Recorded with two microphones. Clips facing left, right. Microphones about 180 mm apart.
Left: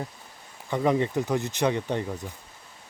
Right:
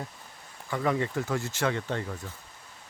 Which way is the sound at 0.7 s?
20° left (ahead or behind).